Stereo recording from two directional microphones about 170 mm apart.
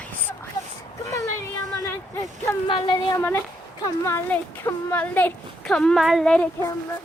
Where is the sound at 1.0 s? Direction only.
15° left (ahead or behind).